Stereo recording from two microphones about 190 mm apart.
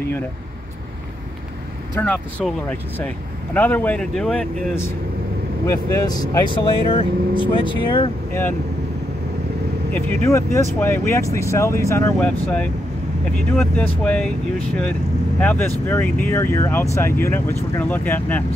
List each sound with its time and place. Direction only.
2.0 s speech: 10° left (ahead or behind)
2.4 s speech: centre (ahead or behind); by 8.1 s 25° left (ahead or behind)
9.9 s speech: 10° left (ahead or behind)